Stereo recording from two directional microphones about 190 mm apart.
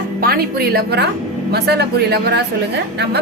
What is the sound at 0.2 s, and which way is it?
A woman's voice, 50° right (ahead or behind).